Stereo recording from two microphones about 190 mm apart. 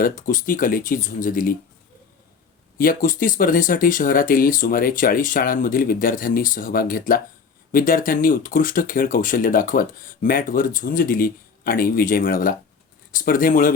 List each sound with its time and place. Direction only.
0.0 s speech: 45° left (ahead or behind)
2.7 s speech: 50° left (ahead or behind)